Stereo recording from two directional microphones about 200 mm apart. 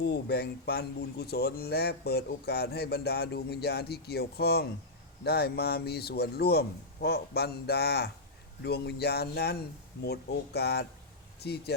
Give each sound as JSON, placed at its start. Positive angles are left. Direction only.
{"t": 0.0, "sound": "speech", "side_deg": 55}